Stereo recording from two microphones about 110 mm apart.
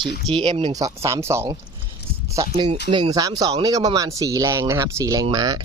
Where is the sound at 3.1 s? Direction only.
35° right (ahead or behind).